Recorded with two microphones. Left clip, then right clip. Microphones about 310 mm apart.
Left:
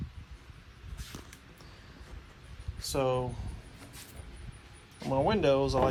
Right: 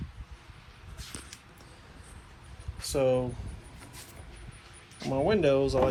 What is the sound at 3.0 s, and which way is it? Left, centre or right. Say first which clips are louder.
Speech: right 4 dB; left.